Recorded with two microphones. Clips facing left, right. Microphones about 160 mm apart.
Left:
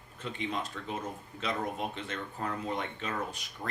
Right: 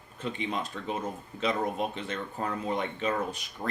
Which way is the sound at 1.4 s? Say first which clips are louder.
Right 5 dB; 20° right (ahead or behind).